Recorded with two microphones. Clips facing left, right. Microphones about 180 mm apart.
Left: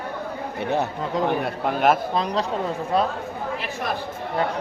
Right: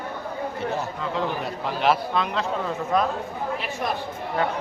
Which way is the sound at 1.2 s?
55° left (ahead or behind).